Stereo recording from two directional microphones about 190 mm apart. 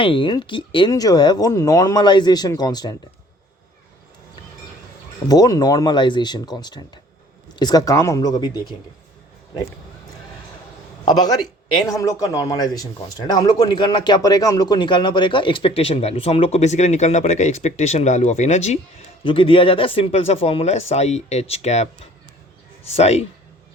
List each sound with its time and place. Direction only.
0.0 s speech: 25° left (ahead or behind)
5.3 s speech: 20° left (ahead or behind)
11.0 s speech: 20° left (ahead or behind)
23.0 s speech: 35° left (ahead or behind)